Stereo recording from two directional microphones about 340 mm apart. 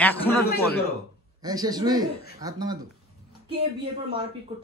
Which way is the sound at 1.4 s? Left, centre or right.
Centre.